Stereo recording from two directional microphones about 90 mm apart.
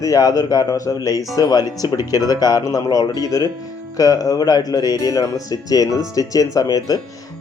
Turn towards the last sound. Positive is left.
turn(degrees=45)  # may be behind; listen again after turning